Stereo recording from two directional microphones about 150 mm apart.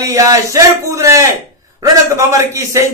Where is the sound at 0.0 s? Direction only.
20° right (ahead or behind).